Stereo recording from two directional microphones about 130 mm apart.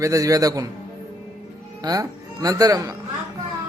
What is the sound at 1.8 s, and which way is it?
Speech, 30° right (ahead or behind).